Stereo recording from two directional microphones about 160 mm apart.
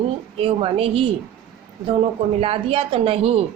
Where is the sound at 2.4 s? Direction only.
35° right (ahead or behind).